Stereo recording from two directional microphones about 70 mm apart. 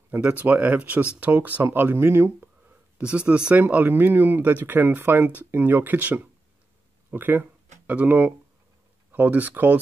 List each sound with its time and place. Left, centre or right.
0.1 s speech: right
3.0 s speech: centre